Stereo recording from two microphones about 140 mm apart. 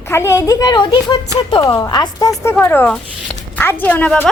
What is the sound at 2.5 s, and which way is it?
Speech, 15° left (ahead or behind).